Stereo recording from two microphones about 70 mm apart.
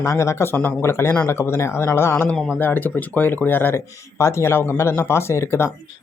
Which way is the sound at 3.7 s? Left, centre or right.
Left.